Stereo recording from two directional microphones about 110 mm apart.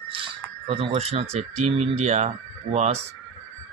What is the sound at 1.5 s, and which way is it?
Speech, 90° right.